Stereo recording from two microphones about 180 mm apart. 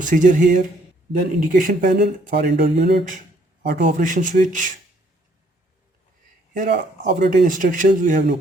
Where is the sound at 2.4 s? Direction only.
65° right (ahead or behind); by 4.7 s 45° right (ahead or behind).